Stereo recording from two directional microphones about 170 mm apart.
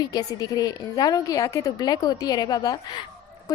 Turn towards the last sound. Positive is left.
turn(degrees=20)  # may be behind; listen again after turning